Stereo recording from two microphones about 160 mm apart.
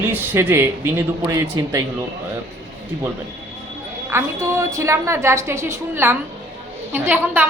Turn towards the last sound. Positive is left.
turn(degrees=-10)  # may be behind; listen again after turning